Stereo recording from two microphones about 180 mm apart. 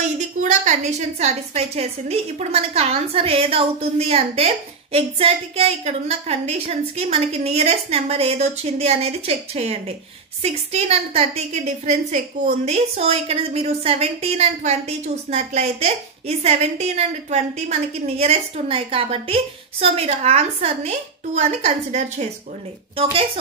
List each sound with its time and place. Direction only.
0.0 s a woman's voice: 40° right (ahead or behind)